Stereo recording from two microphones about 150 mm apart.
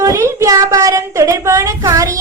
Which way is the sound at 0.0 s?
20° right (ahead or behind).